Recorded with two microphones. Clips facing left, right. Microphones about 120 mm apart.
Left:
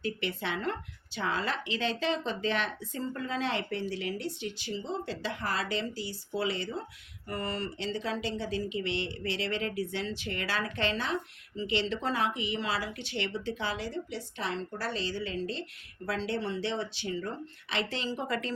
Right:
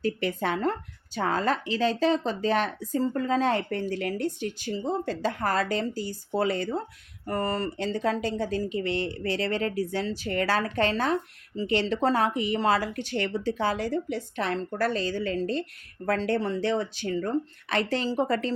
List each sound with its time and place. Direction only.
0.0 s a woman's voice: 40° right (ahead or behind)